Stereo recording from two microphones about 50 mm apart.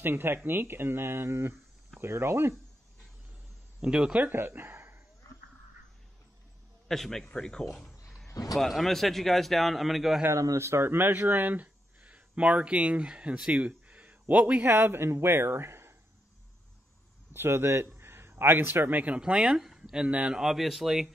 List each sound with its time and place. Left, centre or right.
0.0 s speech: right
3.8 s speech: centre
4.2 s speech: right
6.9 s a man's voice: centre
10.3 s speech: right
11.6 s a sound: right
14.2 s a man's voice: right
14.7 s speech: right
17.3 s a man's voice: right
19.1 s a man's voice: centre
20.3 s speech: centre